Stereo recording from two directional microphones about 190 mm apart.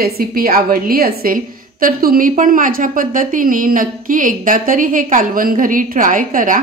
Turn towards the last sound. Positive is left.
turn(degrees=-45)  # may be behind; listen again after turning